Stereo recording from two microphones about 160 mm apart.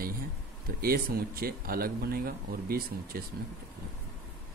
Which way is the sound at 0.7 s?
70° right (ahead or behind).